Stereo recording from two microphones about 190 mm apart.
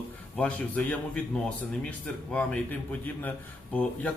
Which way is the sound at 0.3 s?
5° left (ahead or behind).